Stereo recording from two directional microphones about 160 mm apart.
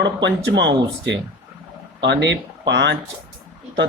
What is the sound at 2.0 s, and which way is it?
Speech, 90° right.